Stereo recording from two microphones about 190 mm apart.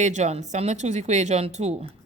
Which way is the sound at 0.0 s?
40° right (ahead or behind).